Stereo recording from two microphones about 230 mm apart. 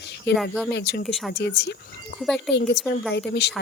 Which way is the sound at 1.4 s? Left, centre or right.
Left.